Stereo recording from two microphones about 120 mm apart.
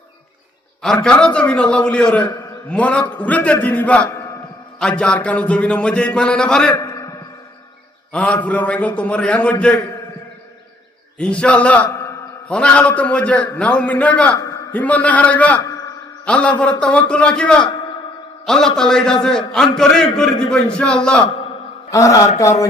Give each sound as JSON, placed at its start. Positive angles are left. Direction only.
{"t": 1.0, "sound": "speech", "side_deg": 10}
{"t": 6.7, "sound": "a sound", "side_deg": 25}
{"t": 8.1, "sound": "speech", "side_deg": 10}
{"t": 11.2, "sound": "speech", "side_deg": 10}
{"t": 14.3, "sound": "a man's voice", "side_deg": 25}
{"t": 14.7, "sound": "a man's voice", "side_deg": 10}
{"t": 21.8, "sound": "a man's voice", "side_deg": 25}